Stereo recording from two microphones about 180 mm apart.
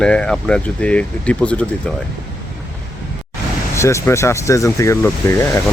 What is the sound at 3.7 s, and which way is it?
Speech, 15° left (ahead or behind).